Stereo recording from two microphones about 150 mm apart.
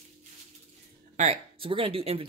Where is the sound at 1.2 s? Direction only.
40° right (ahead or behind).